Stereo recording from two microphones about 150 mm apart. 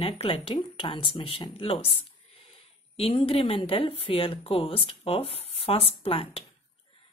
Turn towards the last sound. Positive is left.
turn(degrees=40)  # may be behind; listen again after turning